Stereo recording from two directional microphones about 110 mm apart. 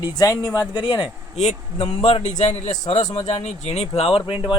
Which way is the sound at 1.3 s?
90° left.